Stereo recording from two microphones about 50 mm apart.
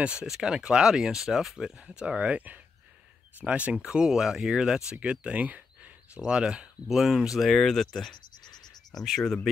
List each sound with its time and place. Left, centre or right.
0.2 s speech: centre
1.8 s speech: centre
4.0 s speech: centre